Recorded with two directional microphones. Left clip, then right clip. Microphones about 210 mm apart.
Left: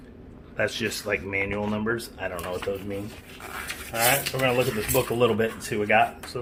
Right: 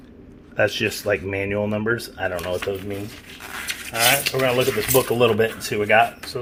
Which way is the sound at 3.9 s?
20° right (ahead or behind).